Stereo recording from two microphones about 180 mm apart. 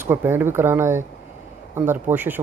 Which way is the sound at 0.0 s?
10° right (ahead or behind).